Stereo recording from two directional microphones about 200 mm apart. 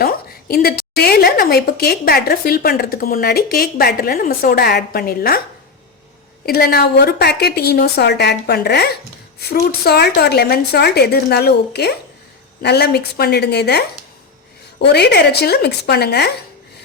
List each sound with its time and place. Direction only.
0.0 s a woman's voice: 50° left (ahead or behind)
6.4 s a woman's voice: 50° left (ahead or behind)